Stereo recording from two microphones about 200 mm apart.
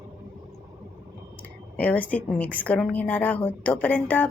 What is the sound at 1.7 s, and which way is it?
A woman's voice, 5° left (ahead or behind).